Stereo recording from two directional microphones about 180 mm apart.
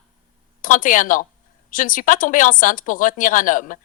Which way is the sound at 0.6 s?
45° left (ahead or behind).